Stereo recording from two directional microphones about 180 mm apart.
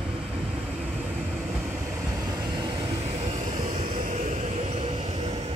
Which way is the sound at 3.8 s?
30° right (ahead or behind).